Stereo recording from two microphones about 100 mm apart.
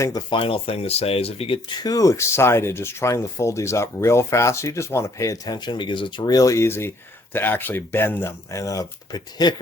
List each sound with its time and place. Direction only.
0.3 s speech: 60° left (ahead or behind)
1.7 s speech: 40° left (ahead or behind)
6.3 s speech: 35° left (ahead or behind)